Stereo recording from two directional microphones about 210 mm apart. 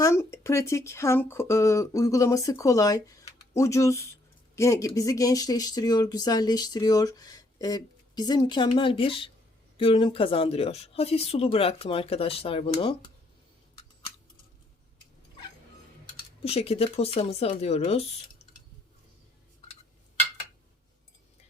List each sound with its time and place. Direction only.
0.0 s speech: 15° left (ahead or behind)
16.4 s speech: 30° left (ahead or behind)